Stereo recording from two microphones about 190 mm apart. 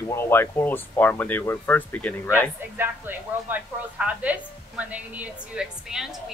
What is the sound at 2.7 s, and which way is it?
A woman's voice, 10° right (ahead or behind).